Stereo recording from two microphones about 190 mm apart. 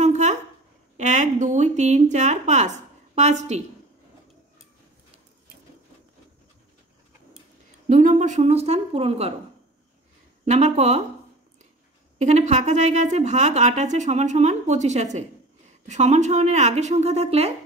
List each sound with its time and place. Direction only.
0.0 s a sound: 35° right (ahead or behind)
0.9 s speech: 40° right (ahead or behind)
7.9 s a woman's voice: 40° right (ahead or behind)
10.4 s a woman's voice: 35° right (ahead or behind)
12.2 s a woman's voice: 40° right (ahead or behind)